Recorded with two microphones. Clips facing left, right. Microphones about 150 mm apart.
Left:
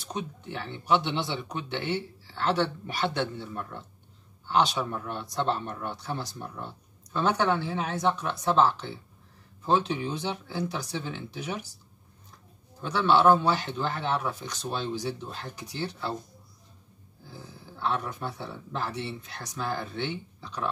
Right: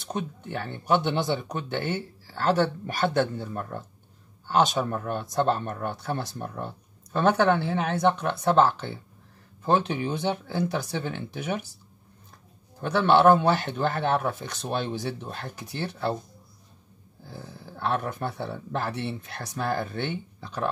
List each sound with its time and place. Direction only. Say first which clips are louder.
0.1 s a man's voice: right 3 dB; 50° right (ahead or behind)
12.8 s a man's voice: right 3 dB; 60° right (ahead or behind)
17.3 s a man's voice: right 4 dB; 55° right (ahead or behind)